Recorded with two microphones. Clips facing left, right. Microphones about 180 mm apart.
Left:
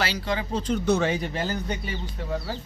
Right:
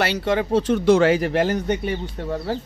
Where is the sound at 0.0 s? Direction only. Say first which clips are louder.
Right 7 dB; 65° right (ahead or behind).